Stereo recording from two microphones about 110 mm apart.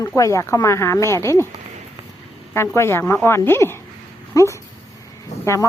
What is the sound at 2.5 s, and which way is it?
A woman's voice, 25° left (ahead or behind).